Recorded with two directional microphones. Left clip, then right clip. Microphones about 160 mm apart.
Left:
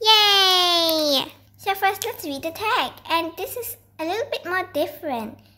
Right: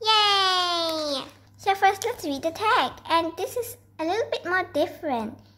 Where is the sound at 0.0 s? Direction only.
40° left (ahead or behind).